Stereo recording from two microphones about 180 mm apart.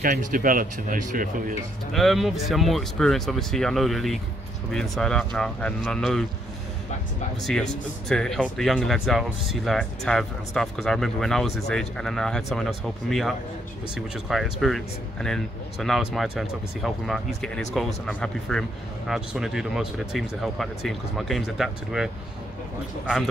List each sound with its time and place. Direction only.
0.0 s speech: 50° right (ahead or behind)
1.9 s speech: centre (ahead or behind)
8.1 s speech: 5° left (ahead or behind)